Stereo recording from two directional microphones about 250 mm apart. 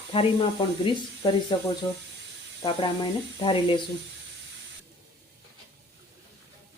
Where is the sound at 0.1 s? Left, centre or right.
Left.